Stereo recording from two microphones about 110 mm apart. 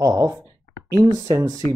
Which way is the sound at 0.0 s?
30° right (ahead or behind).